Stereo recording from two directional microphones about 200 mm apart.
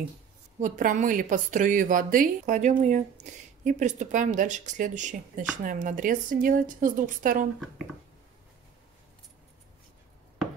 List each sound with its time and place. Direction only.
0.6 s a woman's voice: 40° right (ahead or behind)